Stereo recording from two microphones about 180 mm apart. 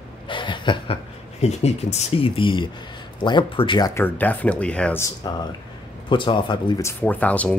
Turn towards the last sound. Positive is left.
turn(degrees=10)  # may be behind; listen again after turning